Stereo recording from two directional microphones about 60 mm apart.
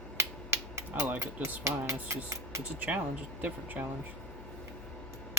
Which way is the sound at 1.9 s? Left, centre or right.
Right.